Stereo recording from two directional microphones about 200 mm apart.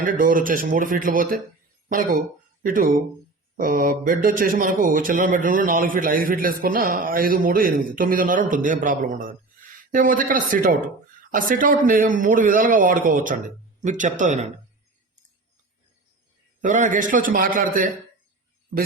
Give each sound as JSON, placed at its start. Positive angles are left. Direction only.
{"t": 0.0, "sound": "speech", "side_deg": -45}
{"t": 16.6, "sound": "speech", "side_deg": -40}